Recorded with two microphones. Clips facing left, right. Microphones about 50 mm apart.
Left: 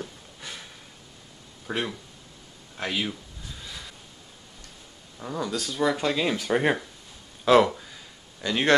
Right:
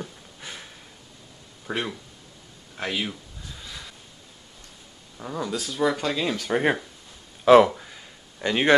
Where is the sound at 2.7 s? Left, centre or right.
Centre.